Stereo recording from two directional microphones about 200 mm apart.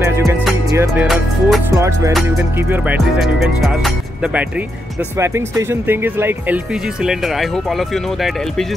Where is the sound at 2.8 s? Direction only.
Centre (ahead or behind).